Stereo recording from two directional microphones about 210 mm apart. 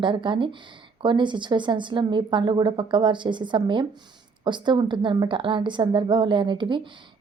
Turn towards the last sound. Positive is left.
turn(degrees=-20)  # may be behind; listen again after turning